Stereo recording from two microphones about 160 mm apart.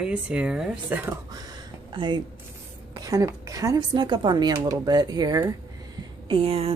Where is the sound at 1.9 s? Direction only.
30° right (ahead or behind).